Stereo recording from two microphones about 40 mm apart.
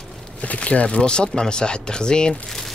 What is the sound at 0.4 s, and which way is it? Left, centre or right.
Speech, left.